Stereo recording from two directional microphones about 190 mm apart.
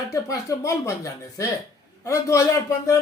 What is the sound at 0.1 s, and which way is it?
A man's voice, 15° left (ahead or behind).